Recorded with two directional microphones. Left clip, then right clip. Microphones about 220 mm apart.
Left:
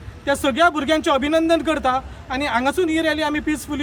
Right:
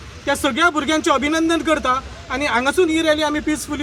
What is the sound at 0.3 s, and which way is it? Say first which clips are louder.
Speech: even; 20° left (ahead or behind).